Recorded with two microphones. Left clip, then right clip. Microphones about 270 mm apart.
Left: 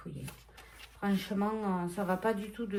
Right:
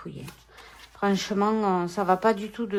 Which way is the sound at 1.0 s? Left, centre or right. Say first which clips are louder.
Right 10 dB; right.